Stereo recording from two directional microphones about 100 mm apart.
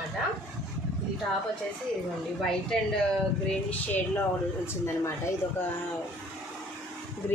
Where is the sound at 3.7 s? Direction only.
20° left (ahead or behind).